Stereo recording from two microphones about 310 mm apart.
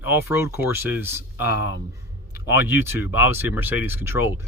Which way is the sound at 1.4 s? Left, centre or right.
Left.